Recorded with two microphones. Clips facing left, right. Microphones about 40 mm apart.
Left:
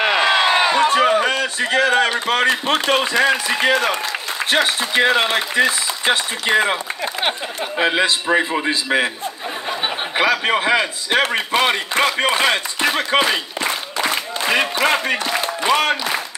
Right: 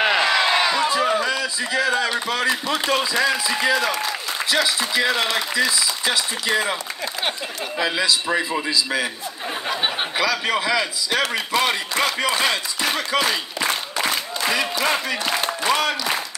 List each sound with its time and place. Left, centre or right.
0.3 s a sound: left
4.5 s a man's voice: left
14.5 s speech: left